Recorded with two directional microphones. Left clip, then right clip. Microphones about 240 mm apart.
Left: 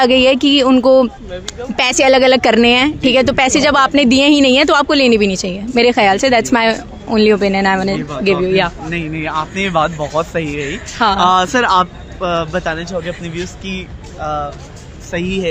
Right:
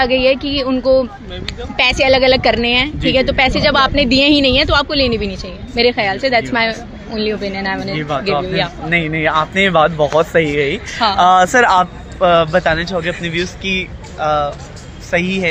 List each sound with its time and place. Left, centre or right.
0.0 s speech: left
8.9 s a man's voice: centre
10.9 s speech: left
11.2 s a man's voice: centre